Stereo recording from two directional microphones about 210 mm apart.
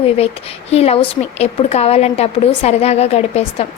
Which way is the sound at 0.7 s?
30° left (ahead or behind).